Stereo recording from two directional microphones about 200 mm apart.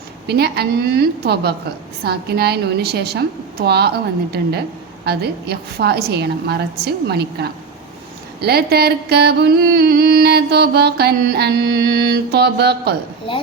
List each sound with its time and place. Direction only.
0.3 s music: 55° right (ahead or behind)